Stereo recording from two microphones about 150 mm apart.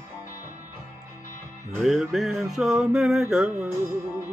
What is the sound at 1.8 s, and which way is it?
Music, centre (ahead or behind).